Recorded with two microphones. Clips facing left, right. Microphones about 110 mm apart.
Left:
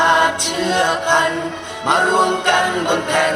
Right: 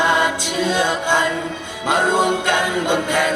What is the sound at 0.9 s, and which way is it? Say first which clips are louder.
Music: left 2 dB; 20° left (ahead or behind).